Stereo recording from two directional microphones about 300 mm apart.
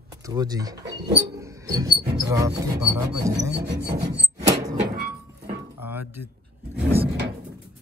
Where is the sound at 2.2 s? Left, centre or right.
Centre.